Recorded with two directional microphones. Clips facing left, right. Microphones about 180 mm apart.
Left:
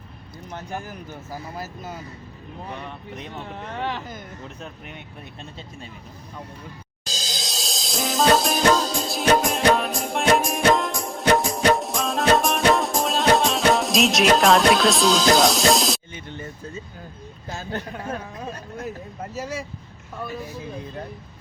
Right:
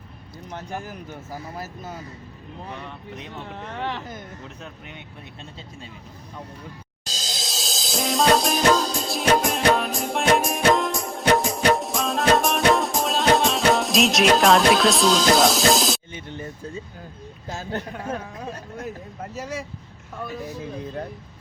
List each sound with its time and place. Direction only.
3.3 s speech: 15° left (ahead or behind)
4.6 s speech: 50° left (ahead or behind)
7.4 s music: centre (ahead or behind)
17.6 s speech: 25° right (ahead or behind)
19.3 s speech: 5° left (ahead or behind)